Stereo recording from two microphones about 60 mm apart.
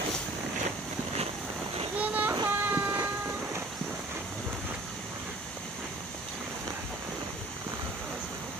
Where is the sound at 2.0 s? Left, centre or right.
Right.